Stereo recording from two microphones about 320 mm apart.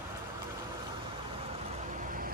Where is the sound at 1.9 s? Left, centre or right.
Right.